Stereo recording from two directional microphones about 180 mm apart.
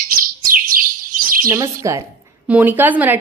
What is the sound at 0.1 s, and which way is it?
Chirp, 50° right (ahead or behind).